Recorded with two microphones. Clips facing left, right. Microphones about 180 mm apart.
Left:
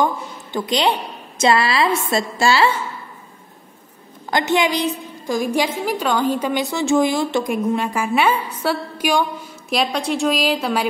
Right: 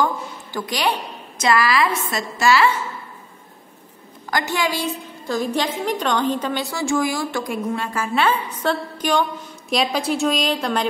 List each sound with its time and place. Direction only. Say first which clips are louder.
0.0 s a woman's voice: left 2 dB; 20° left (ahead or behind)
4.3 s a woman's voice: left 4 dB; 20° left (ahead or behind); by 10.9 s 5° left (ahead or behind)